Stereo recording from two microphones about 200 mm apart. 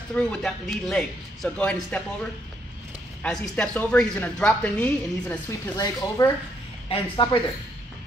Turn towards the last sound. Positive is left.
turn(degrees=25)  # may be behind; listen again after turning